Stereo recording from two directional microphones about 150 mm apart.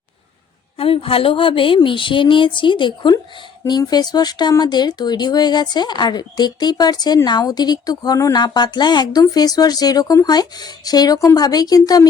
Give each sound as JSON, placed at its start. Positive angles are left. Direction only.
{"t": 0.8, "sound": "speech", "side_deg": 40}